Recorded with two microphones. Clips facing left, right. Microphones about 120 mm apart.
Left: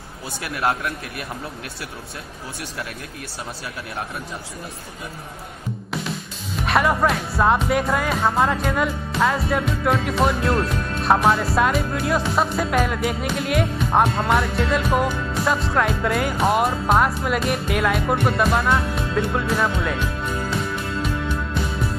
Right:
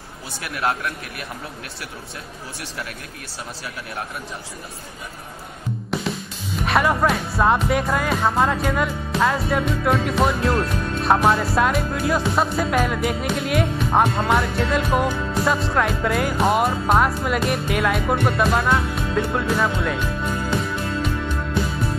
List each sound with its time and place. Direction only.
0.4 s speech: 25° left (ahead or behind)
6.6 s music: centre (ahead or behind)